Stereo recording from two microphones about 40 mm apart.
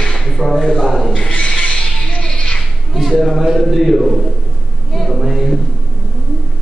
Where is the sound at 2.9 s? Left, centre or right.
Centre.